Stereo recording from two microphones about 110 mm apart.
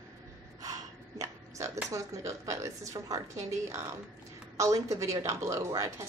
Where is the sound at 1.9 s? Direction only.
25° right (ahead or behind).